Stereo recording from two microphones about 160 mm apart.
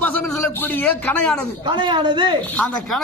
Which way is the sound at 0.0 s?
10° left (ahead or behind).